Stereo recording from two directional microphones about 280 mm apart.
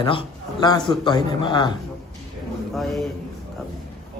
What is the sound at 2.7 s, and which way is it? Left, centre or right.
Speech, centre.